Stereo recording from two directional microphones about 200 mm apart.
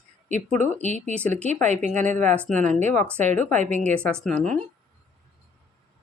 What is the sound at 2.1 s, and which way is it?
Speech, 5° left (ahead or behind).